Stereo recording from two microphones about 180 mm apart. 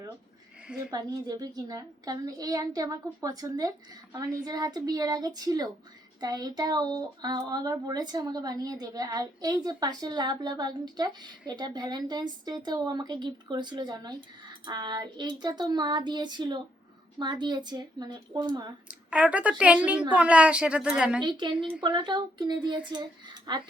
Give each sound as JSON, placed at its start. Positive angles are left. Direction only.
{"t": 0.9, "sound": "speech", "side_deg": -20}
{"t": 18.9, "sound": "a woman's voice", "side_deg": -5}
{"t": 21.2, "sound": "speech", "side_deg": -25}